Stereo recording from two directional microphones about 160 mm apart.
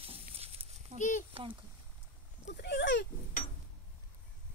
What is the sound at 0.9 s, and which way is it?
Speech, 50° left (ahead or behind).